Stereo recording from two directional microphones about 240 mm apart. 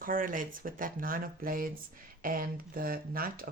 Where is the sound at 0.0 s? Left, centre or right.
Right.